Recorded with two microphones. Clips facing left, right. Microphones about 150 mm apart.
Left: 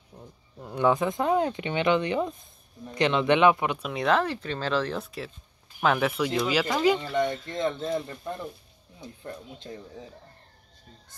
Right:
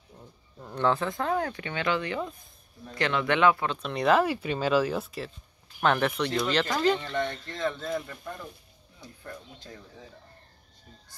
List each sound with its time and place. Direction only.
0.1 s a sound: 10° left (ahead or behind)
0.6 s speech: 10° left (ahead or behind)
3.9 s speech: 5° right (ahead or behind)
7.4 s speech: 20° left (ahead or behind)